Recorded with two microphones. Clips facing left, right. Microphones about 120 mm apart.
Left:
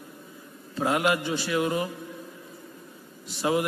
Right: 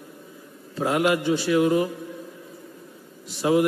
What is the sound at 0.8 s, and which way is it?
A man's voice, 5° right (ahead or behind).